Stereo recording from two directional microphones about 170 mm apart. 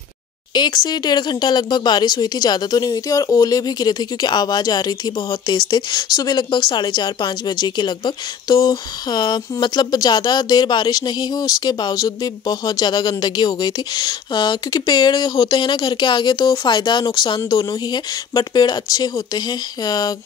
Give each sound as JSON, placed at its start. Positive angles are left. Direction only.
{"t": 0.6, "sound": "speech", "side_deg": 25}